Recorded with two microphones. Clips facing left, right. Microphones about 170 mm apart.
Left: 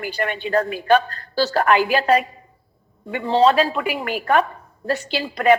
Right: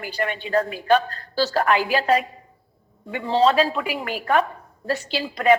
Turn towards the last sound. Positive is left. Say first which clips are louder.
# left 2 dB
turn(degrees=60)  # may be behind; listen again after turning